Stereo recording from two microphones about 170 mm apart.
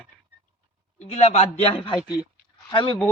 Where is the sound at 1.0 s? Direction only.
40° left (ahead or behind).